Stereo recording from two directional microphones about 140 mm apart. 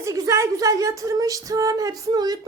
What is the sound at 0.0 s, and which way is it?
A woman's voice, 20° right (ahead or behind).